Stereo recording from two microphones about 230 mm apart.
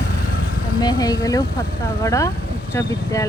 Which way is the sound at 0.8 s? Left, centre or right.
Centre.